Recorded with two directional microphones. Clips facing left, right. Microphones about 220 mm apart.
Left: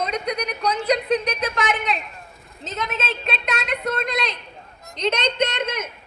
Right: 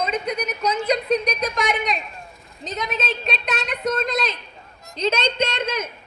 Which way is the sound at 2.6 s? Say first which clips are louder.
Right 1 dB; centre (ahead or behind).